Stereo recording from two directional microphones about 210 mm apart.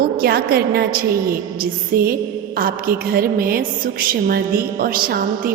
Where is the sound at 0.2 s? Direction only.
45° right (ahead or behind).